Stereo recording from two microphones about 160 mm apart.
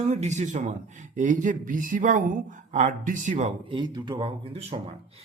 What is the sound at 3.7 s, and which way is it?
Speech, 30° right (ahead or behind).